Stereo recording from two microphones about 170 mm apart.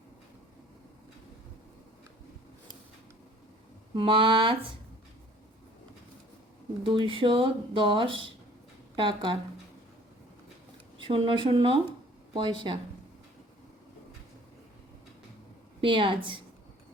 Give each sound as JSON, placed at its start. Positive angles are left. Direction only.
{"t": 3.9, "sound": "speech", "side_deg": -30}
{"t": 6.8, "sound": "speech", "side_deg": -30}
{"t": 11.0, "sound": "speech", "side_deg": -30}
{"t": 15.8, "sound": "speech", "side_deg": -30}